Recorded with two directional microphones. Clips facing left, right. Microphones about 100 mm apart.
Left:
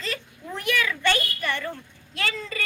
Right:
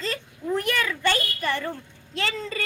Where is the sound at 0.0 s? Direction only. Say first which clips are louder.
Right 3 dB; 40° right (ahead or behind).